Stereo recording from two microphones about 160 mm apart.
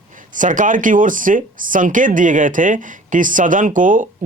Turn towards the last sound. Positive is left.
turn(degrees=-55)  # may be behind; listen again after turning